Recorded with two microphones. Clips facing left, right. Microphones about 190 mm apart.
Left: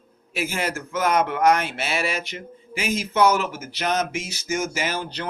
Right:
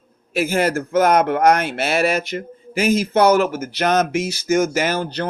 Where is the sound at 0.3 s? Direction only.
55° right (ahead or behind).